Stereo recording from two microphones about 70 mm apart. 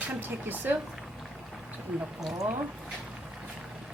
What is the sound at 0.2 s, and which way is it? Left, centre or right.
Speech, right.